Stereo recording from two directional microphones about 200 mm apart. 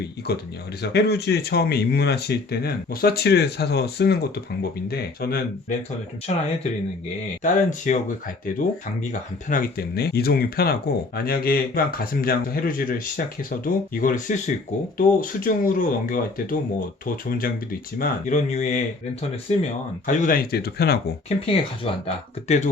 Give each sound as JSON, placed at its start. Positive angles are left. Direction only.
{"t": 0.3, "sound": "speech", "side_deg": 55}
{"t": 6.3, "sound": "speech", "side_deg": 35}
{"t": 9.5, "sound": "speech", "side_deg": 45}
{"t": 20.1, "sound": "speech", "side_deg": 45}
{"t": 21.2, "sound": "speech", "side_deg": 30}